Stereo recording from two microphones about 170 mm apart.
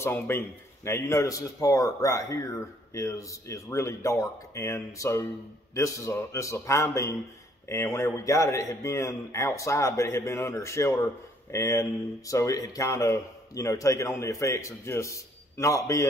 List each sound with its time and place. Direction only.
0.0 s a man's voice: 15° left (ahead or behind)